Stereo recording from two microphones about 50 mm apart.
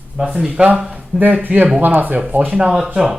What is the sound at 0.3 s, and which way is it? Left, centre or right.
Speech, right.